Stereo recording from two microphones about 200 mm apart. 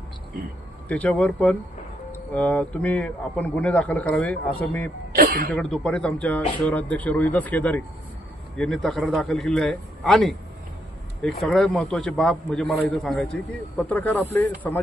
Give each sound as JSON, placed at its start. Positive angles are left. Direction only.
{"t": 0.8, "sound": "speech", "side_deg": 5}
{"t": 5.1, "sound": "speech", "side_deg": -50}
{"t": 5.5, "sound": "a man's voice", "side_deg": 5}